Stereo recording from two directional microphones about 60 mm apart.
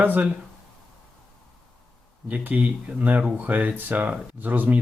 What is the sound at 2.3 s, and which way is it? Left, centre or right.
Speech, right.